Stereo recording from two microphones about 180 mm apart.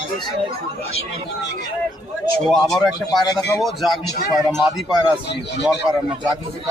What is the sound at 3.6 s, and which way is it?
Speech, centre (ahead or behind).